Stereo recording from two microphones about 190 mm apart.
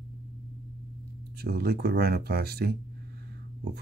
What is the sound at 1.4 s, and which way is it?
Speech, 55° right (ahead or behind).